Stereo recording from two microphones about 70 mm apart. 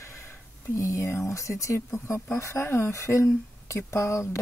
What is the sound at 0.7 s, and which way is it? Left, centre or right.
A woman's voice, left.